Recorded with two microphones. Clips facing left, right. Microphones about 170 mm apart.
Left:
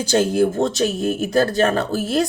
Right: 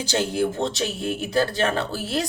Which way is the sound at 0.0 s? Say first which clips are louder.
Left 6 dB; 50° left (ahead or behind).